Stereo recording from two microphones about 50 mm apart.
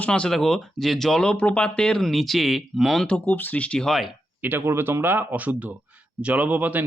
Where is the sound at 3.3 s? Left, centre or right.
Left.